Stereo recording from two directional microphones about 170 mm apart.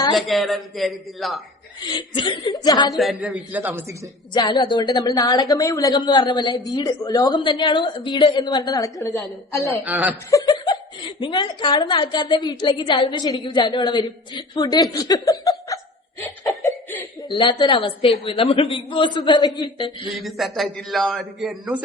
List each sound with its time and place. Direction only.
0.1 s a man's voice: centre (ahead or behind)
1.8 s a woman's voice: 25° left (ahead or behind)
2.9 s a man's voice: centre (ahead or behind)
4.4 s a woman's voice: 25° left (ahead or behind)
9.8 s a man's voice: 10° right (ahead or behind)
10.2 s a woman's voice: 20° left (ahead or behind)
16.6 s cough: 10° left (ahead or behind)
17.2 s a woman's voice: 30° left (ahead or behind)
20.1 s a man's voice: centre (ahead or behind)